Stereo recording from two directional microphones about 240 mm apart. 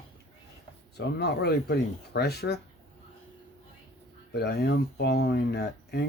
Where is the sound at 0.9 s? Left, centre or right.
Left.